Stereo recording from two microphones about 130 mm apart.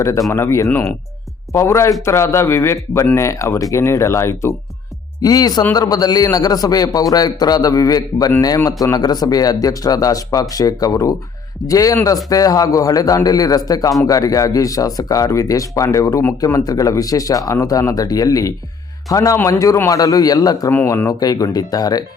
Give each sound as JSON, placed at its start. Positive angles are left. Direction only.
{"t": 0.3, "sound": "speech", "side_deg": 20}